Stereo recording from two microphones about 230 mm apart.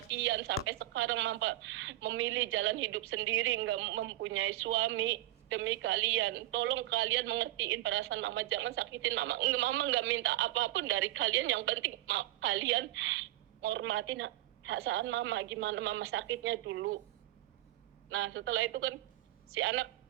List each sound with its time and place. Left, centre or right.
0.2 s a sound: right
0.7 s a woman's voice: right
18.1 s a woman's voice: right